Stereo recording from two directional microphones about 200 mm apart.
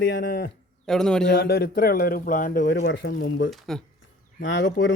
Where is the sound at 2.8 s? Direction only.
65° left (ahead or behind).